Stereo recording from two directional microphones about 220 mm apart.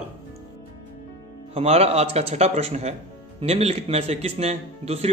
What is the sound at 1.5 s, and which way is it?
Speech, 30° right (ahead or behind).